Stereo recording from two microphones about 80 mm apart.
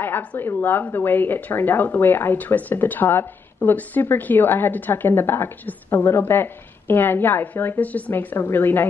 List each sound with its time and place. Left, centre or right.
0.0 s a woman's voice: left